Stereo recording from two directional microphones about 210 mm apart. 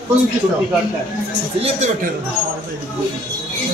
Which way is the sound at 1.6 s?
35° right (ahead or behind).